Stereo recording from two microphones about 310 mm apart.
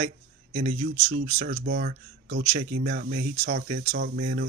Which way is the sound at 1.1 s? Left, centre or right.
Right.